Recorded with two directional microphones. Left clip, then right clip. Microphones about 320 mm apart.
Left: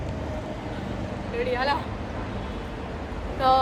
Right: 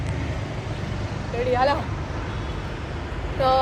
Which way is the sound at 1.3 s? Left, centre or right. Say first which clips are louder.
Right 4 dB; centre.